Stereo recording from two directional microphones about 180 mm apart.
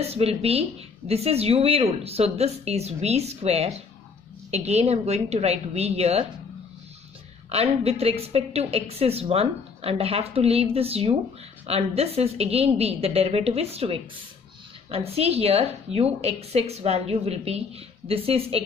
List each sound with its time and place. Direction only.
0.0 s speech: 35° right (ahead or behind)
7.4 s speech: 35° right (ahead or behind)